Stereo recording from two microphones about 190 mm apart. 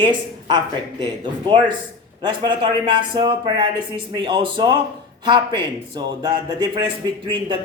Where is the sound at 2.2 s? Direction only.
25° right (ahead or behind).